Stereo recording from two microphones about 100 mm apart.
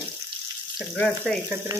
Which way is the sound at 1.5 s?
25° right (ahead or behind).